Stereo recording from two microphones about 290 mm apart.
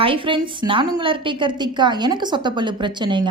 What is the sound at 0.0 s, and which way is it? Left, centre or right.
A woman's voice, centre.